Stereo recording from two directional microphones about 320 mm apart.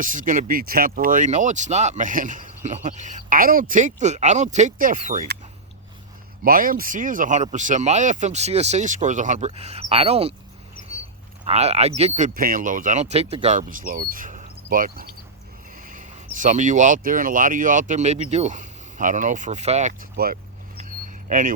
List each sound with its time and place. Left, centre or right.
0.0 s speech: right
6.4 s speech: right
11.4 s speech: centre